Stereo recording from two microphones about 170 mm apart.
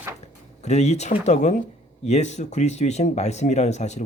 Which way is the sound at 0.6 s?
40° left (ahead or behind).